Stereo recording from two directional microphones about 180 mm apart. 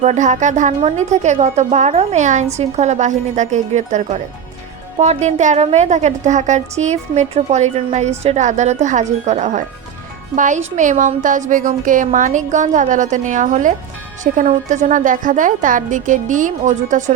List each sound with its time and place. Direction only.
0.0 s a woman's voice: 40° right (ahead or behind)